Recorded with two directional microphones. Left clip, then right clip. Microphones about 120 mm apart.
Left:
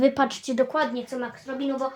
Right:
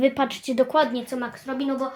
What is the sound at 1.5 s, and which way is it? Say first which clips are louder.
Speech: right 5 dB; 90° right.